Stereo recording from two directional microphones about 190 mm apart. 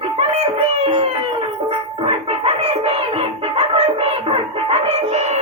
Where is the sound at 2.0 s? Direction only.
30° right (ahead or behind).